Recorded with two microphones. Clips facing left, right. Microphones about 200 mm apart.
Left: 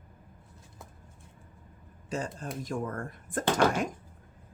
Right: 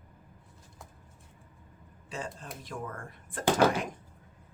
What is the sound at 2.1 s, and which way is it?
Speech, 45° left (ahead or behind).